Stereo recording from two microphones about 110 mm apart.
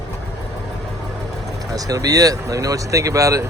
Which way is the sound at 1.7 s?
30° right (ahead or behind).